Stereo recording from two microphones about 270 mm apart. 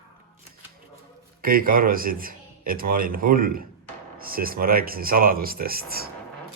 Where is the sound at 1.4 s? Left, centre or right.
Right.